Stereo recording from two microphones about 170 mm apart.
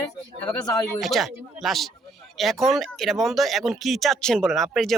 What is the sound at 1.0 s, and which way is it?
Speech, centre (ahead or behind).